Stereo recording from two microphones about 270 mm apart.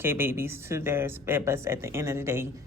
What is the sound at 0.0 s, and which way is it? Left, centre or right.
Speech, centre.